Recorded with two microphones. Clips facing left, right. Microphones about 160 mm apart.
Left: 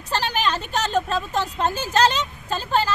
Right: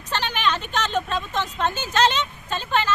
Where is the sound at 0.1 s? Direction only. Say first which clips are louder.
Left 1 dB; 35° left (ahead or behind).